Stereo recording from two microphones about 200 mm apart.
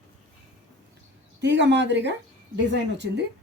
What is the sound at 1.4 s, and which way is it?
A woman's voice, 60° right (ahead or behind).